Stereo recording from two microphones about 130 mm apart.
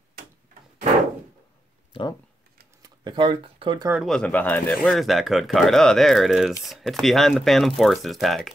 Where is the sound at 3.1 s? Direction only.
40° right (ahead or behind).